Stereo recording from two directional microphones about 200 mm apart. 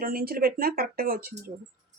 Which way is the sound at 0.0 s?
50° right (ahead or behind).